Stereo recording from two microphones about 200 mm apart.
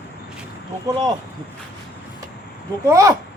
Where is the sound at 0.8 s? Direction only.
20° right (ahead or behind).